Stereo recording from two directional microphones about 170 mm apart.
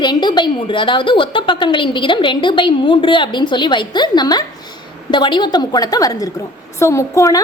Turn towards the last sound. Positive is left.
turn(degrees=20)  # may be behind; listen again after turning